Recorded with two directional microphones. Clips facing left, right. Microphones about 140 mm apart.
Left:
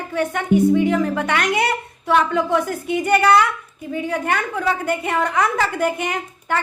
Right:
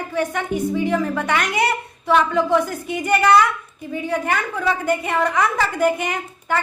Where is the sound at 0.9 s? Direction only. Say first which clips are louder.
Left 1 dB; 25° right (ahead or behind).